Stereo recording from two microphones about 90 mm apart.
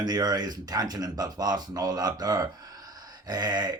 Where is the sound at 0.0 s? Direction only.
50° right (ahead or behind).